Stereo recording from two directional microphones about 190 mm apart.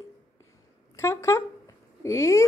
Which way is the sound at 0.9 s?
15° left (ahead or behind).